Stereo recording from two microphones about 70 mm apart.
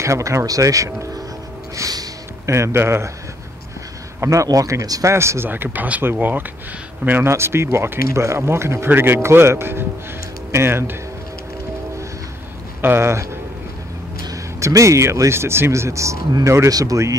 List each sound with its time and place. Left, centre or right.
0.0 s speech: right
1.8 s music: right
2.4 s speech: right
4.2 s speech: right
5.1 s speech: right
5.5 s speech: right
7.2 s speech: right
12.8 s speech: right
14.2 s speech: right